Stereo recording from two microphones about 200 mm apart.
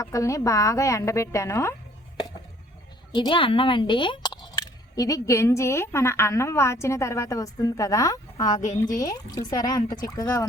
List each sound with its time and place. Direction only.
0.0 s speech: 15° left (ahead or behind)
3.1 s speech: 25° left (ahead or behind)